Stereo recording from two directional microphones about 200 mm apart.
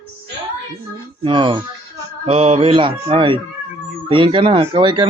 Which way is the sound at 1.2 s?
25° right (ahead or behind).